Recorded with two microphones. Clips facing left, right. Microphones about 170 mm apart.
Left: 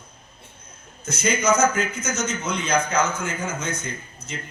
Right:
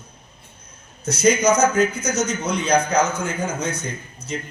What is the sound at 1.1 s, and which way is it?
A man's voice, 35° right (ahead or behind).